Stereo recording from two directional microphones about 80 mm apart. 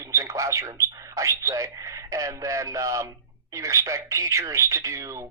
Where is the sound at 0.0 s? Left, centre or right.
Right.